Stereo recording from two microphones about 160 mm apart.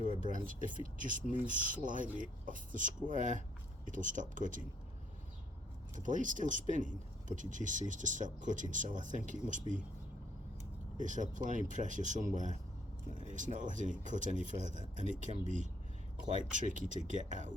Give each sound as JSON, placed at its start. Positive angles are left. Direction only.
{"t": 0.2, "sound": "speech", "side_deg": -55}
{"t": 5.9, "sound": "speech", "side_deg": -55}
{"t": 10.9, "sound": "speech", "side_deg": -50}